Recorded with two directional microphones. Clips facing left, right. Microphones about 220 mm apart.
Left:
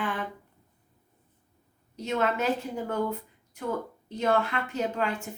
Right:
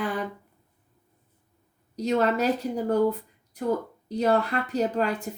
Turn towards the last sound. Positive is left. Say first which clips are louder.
# right 4 dB
turn(degrees=-40)  # may be behind; listen again after turning